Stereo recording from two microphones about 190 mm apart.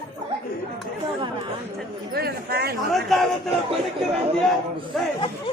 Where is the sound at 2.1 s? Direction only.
55° right (ahead or behind).